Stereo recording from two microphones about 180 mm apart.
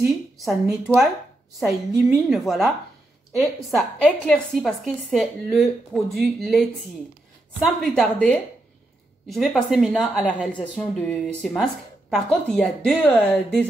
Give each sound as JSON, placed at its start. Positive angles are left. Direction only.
{"t": 0.0, "sound": "a woman's voice", "side_deg": -5}